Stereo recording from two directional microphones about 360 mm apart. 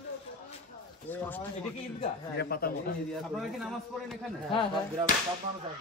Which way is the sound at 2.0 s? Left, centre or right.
Left.